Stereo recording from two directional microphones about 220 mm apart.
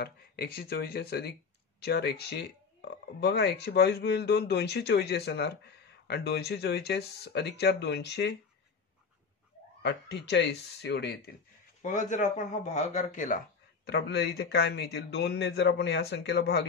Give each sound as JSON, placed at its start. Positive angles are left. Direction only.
{"t": 0.0, "sound": "speech", "side_deg": 45}
{"t": 9.8, "sound": "speech", "side_deg": 50}
{"t": 11.8, "sound": "speech", "side_deg": 35}
{"t": 13.8, "sound": "speech", "side_deg": 50}